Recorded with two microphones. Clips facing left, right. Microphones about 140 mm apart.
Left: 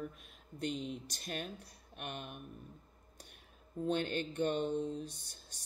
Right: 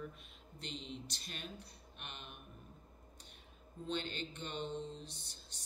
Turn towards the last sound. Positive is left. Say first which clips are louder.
# left 8 dB
turn(degrees=50)  # may be behind; listen again after turning